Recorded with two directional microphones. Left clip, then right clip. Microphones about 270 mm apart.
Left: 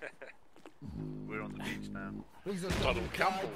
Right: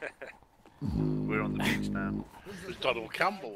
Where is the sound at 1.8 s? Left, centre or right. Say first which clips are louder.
Right 9 dB; right.